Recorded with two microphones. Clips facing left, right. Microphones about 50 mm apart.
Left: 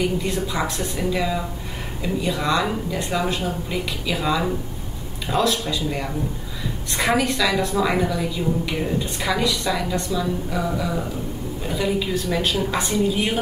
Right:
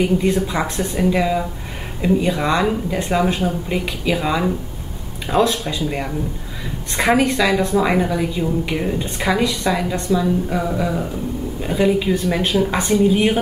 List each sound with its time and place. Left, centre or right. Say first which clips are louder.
0.0 s a woman's voice: right 6 dB; right
10.1 s a woman's voice: right 9 dB; centre
10.8 s a sound: right 4 dB; centre
11.6 s a woman's voice: right 6 dB; right